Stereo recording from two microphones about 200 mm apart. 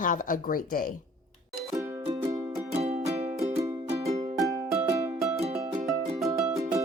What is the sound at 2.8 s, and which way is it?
Music, 30° right (ahead or behind).